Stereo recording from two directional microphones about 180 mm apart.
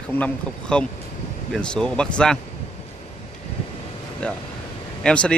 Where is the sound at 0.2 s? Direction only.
5° left (ahead or behind).